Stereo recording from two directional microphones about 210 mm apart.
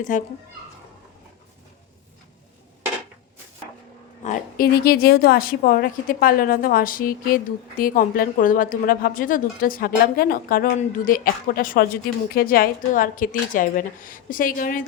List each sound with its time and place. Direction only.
0.1 s a woman's voice: 35° left (ahead or behind)
4.2 s a woman's voice: 40° left (ahead or behind)